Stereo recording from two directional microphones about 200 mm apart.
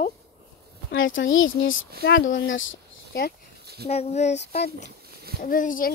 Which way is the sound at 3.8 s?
30° left (ahead or behind).